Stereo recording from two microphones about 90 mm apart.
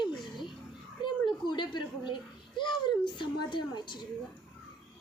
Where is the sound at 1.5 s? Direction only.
60° left (ahead or behind).